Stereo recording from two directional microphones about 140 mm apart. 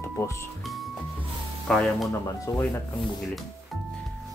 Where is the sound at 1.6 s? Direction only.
5° left (ahead or behind).